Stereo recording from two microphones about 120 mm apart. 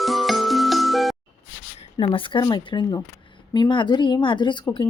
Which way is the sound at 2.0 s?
45° left (ahead or behind).